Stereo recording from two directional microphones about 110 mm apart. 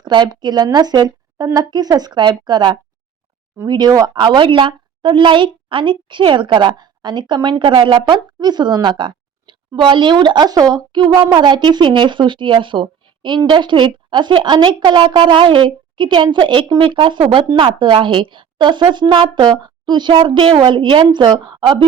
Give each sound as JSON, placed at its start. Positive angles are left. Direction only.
{"t": 0.0, "sound": "a woman's voice", "side_deg": -40}